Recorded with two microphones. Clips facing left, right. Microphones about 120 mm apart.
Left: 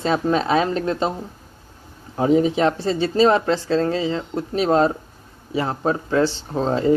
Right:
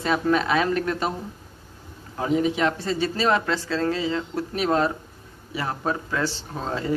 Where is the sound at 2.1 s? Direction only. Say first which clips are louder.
Left 6 dB; 30° left (ahead or behind).